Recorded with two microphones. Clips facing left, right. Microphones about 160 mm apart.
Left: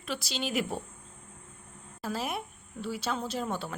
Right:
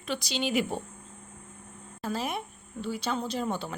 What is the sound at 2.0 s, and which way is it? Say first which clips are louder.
Speech: right 2 dB; 5° left (ahead or behind).